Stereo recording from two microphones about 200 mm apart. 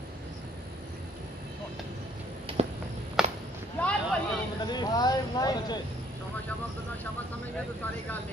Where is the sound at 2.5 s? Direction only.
25° right (ahead or behind).